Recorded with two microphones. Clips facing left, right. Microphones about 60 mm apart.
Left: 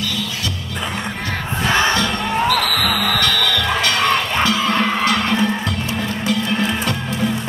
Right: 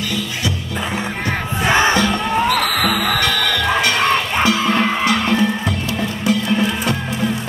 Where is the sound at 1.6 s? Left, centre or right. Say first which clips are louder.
Right 2 dB; right; by 5.5 s centre.